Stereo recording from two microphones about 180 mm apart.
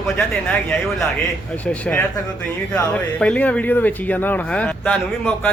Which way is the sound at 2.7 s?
5° left (ahead or behind).